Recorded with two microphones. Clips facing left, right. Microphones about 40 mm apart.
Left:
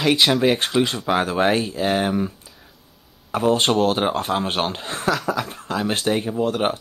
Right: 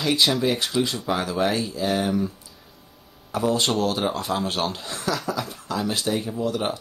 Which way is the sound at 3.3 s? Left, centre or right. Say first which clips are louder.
Left 4 dB; left.